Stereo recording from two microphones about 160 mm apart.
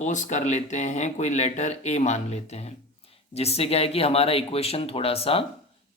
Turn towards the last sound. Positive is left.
turn(degrees=35)  # may be behind; listen again after turning